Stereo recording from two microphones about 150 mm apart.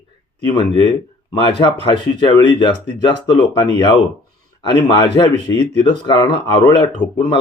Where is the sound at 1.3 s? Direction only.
35° left (ahead or behind).